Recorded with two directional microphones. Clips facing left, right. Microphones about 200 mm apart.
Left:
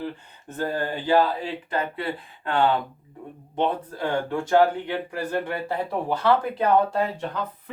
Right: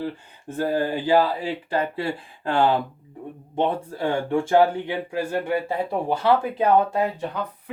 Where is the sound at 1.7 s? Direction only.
30° right (ahead or behind).